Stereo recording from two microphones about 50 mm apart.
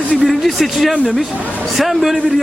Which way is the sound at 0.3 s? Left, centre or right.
Centre.